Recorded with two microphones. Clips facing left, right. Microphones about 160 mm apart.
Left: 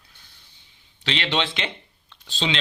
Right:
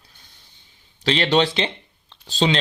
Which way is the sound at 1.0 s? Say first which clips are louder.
Right 7 dB; 40° right (ahead or behind).